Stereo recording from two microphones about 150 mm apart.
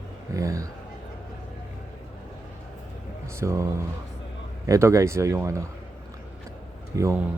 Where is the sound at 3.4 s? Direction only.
20° right (ahead or behind).